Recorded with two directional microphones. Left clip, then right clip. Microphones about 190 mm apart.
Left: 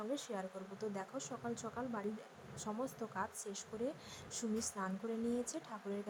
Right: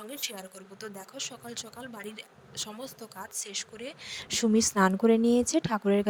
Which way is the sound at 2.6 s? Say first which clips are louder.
Right 4 dB; 50° right (ahead or behind).